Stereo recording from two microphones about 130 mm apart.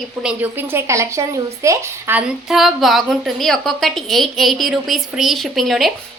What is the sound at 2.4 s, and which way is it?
A woman's voice, centre (ahead or behind).